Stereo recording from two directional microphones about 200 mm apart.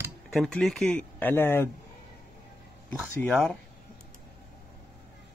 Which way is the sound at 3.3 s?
Centre (ahead or behind).